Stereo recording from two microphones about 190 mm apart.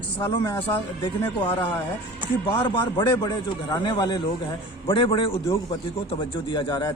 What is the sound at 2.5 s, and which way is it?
A man's voice, 25° left (ahead or behind).